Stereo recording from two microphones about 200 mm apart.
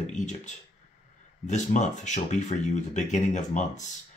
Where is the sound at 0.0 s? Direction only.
35° left (ahead or behind).